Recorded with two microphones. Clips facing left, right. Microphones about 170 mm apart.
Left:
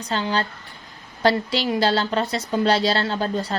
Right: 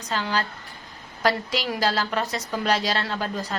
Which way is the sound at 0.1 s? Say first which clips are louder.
Left 3 dB; 30° left (ahead or behind).